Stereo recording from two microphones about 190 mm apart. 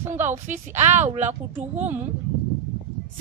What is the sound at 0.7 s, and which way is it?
Speech, 35° right (ahead or behind).